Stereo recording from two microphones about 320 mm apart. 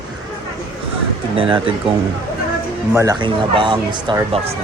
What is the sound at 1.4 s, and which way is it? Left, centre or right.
Speech, centre.